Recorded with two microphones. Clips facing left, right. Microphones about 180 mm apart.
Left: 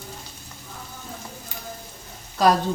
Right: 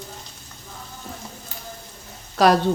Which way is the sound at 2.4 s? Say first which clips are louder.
Right 2 dB; 75° right (ahead or behind).